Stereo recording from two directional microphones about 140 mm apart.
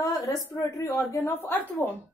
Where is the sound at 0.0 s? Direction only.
25° left (ahead or behind).